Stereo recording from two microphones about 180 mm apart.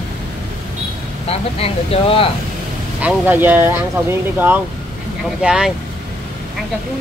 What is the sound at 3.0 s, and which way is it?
Speech, 10° right (ahead or behind).